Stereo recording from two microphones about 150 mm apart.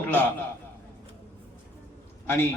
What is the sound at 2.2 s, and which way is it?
Speech, 15° left (ahead or behind).